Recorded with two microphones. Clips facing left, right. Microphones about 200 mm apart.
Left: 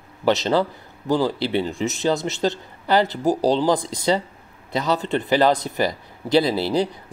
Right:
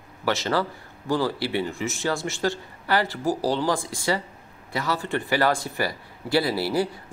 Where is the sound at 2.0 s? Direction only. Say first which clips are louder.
Left 4 dB; 20° left (ahead or behind).